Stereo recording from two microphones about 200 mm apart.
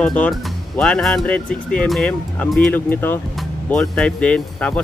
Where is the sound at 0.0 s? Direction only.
5° left (ahead or behind).